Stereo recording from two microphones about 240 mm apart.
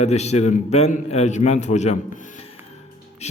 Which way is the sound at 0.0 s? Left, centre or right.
Left.